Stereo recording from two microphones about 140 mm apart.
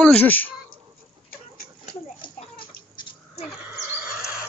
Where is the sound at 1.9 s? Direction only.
35° left (ahead or behind).